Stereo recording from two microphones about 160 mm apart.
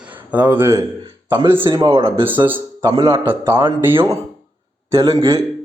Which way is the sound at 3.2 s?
15° right (ahead or behind).